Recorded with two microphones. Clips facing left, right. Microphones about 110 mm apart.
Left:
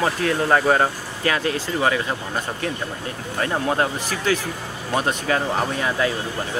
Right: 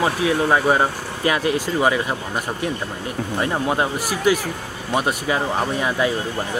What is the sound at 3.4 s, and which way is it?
Speech, 10° right (ahead or behind).